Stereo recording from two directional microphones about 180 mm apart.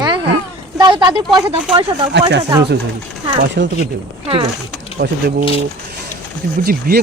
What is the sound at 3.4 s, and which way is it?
Speech, 75° right (ahead or behind).